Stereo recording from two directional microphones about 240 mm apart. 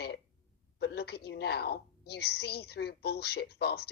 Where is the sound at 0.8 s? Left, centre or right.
Left.